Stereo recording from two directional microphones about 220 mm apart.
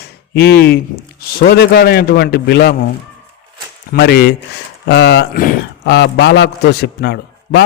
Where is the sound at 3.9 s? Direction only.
45° left (ahead or behind).